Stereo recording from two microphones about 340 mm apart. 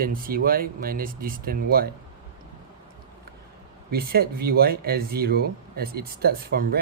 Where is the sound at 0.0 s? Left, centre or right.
Right.